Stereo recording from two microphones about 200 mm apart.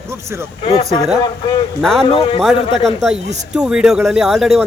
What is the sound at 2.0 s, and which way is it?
Speech, 25° left (ahead or behind).